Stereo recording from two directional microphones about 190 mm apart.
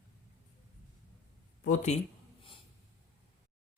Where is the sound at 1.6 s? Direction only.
40° left (ahead or behind).